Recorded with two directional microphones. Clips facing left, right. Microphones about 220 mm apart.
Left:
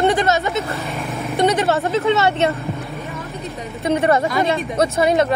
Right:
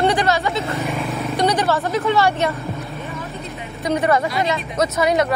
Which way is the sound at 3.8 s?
25° left (ahead or behind).